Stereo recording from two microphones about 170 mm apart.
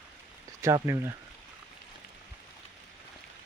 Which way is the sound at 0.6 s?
20° right (ahead or behind).